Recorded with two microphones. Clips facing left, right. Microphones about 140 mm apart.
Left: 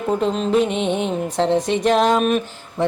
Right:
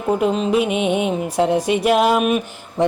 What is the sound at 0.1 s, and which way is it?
A woman's voice, 10° right (ahead or behind).